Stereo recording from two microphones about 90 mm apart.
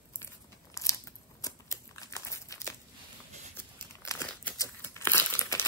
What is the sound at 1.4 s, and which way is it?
Crumpling, 35° left (ahead or behind).